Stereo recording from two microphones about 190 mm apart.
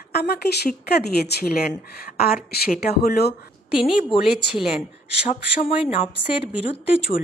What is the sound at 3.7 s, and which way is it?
Speech, 5° right (ahead or behind).